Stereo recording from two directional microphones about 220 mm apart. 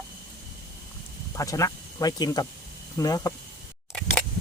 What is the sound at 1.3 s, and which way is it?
Speech, 15° left (ahead or behind).